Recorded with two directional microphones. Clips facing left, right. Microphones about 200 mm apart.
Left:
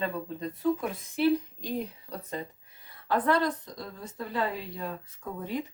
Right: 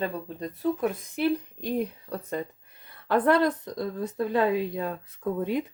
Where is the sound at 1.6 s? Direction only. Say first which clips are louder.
Right 5 dB; 55° right (ahead or behind).